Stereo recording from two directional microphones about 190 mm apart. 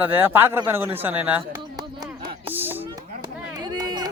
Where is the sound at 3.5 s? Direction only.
20° right (ahead or behind).